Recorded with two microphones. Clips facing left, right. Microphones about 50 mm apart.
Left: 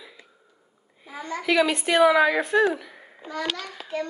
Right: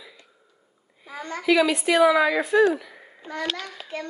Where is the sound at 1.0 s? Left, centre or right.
Right.